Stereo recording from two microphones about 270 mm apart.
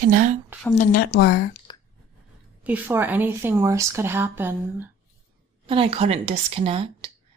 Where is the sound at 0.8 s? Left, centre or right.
Left.